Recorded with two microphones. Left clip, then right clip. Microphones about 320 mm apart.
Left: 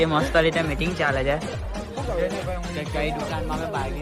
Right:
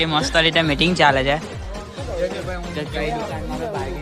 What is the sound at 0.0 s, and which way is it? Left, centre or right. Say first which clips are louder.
Speech: right 2 dB; centre.